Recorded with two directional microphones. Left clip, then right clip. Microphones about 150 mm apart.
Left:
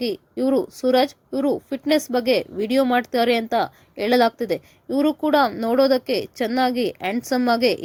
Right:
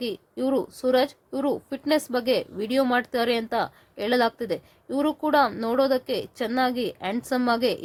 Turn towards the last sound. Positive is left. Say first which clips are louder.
# left 4 dB
turn(degrees=20)  # may be behind; listen again after turning